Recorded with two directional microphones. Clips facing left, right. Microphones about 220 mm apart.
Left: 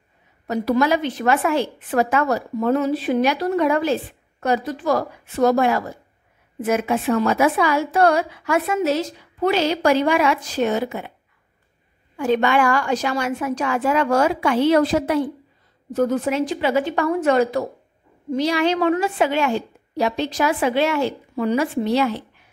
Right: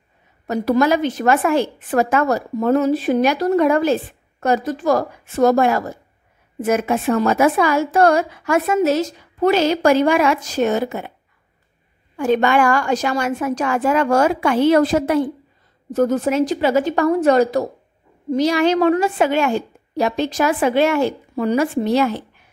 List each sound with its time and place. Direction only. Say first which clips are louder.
0.5 s a woman's voice: right 2 dB; 45° right (ahead or behind)
12.2 s a woman's voice: right 2 dB; 45° right (ahead or behind)